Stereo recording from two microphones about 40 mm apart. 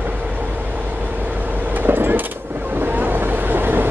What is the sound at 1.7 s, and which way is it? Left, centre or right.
Vehicle, right.